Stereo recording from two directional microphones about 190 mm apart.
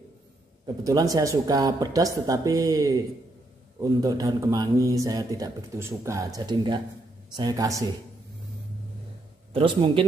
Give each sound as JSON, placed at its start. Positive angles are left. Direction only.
{"t": 0.8, "sound": "a man's voice", "side_deg": -20}
{"t": 9.5, "sound": "a man's voice", "side_deg": -30}